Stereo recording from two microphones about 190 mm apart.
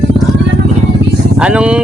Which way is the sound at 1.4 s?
5° right (ahead or behind).